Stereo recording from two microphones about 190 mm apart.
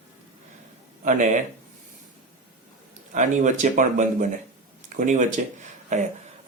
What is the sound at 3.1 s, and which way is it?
Speech, 40° right (ahead or behind).